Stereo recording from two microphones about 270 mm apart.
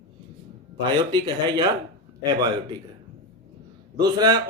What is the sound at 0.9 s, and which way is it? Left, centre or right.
Speech, centre.